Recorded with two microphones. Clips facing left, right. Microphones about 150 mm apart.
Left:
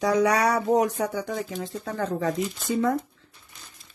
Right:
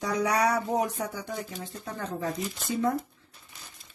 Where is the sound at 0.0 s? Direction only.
90° left.